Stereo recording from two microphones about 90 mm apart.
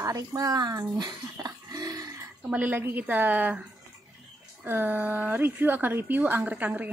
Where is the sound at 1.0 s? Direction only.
45° right (ahead or behind).